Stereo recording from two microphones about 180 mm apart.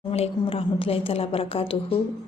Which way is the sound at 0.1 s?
30° left (ahead or behind).